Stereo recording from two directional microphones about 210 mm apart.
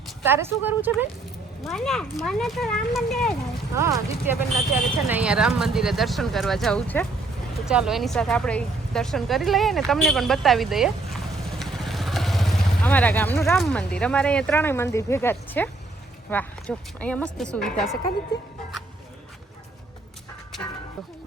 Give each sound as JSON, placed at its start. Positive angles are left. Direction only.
{"t": 0.3, "sound": "speech", "side_deg": -10}
{"t": 1.6, "sound": "speech", "side_deg": 0}
{"t": 3.8, "sound": "speech", "side_deg": -15}
{"t": 18.3, "sound": "music", "side_deg": 20}